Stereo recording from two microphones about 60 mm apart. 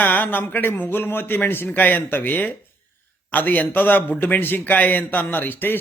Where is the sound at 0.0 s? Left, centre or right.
Left.